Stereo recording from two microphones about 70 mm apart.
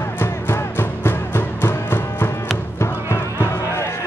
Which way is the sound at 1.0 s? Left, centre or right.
Left.